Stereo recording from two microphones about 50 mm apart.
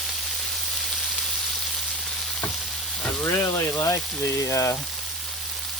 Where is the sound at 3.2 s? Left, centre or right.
Left.